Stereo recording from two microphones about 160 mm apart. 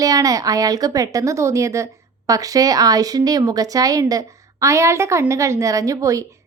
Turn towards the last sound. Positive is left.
turn(degrees=-20)  # may be behind; listen again after turning